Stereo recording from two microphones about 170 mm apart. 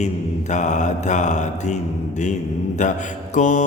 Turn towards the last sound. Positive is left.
turn(degrees=45)  # may be behind; listen again after turning